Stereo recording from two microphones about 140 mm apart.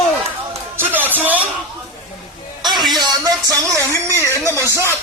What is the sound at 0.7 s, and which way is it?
Music, 15° right (ahead or behind).